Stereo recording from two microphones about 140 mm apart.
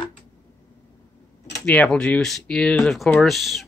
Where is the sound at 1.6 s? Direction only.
5° left (ahead or behind).